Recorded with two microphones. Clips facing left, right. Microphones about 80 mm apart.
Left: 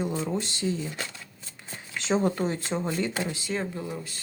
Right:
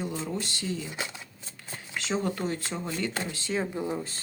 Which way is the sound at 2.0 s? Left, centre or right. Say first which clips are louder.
Left 5 dB; left.